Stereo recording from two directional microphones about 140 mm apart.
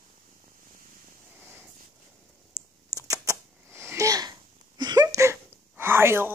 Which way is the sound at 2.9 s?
25° right (ahead or behind).